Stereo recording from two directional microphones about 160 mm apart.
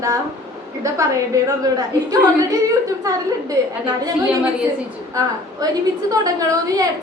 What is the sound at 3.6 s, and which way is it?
Speech, 20° right (ahead or behind).